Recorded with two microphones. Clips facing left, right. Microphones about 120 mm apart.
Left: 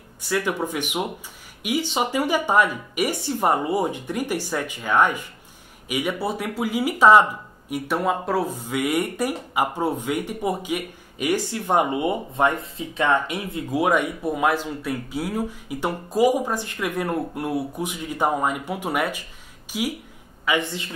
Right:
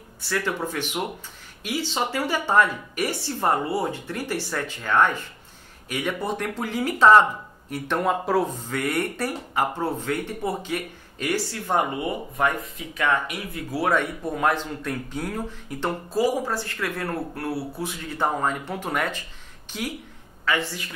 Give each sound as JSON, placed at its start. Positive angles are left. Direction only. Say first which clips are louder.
{"t": 0.2, "sound": "speech", "louder": "left 3 dB", "side_deg": 15}
{"t": 8.5, "sound": "speech", "louder": "left 3 dB", "side_deg": 10}